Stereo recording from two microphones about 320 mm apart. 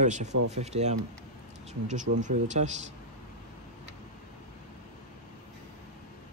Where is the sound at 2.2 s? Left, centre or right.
Right.